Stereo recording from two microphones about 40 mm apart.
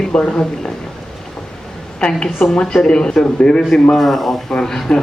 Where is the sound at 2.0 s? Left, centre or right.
Left.